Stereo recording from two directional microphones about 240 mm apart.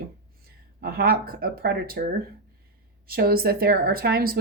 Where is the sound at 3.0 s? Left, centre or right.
Right.